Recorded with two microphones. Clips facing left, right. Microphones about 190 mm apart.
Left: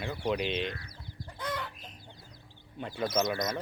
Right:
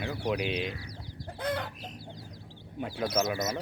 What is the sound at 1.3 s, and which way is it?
Chicken, 60° right (ahead or behind).